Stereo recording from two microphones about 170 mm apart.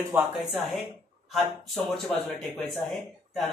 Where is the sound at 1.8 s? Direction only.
Centre (ahead or behind).